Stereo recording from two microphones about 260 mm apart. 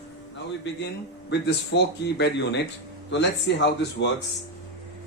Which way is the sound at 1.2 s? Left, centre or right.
Left.